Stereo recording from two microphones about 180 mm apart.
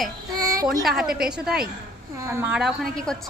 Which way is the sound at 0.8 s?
Centre (ahead or behind).